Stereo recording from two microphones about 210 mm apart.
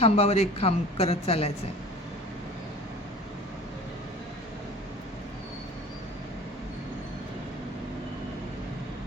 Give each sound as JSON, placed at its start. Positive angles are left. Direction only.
{"t": 0.0, "sound": "a woman's voice", "side_deg": 30}